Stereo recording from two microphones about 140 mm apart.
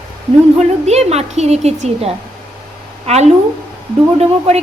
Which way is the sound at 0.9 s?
50° right (ahead or behind).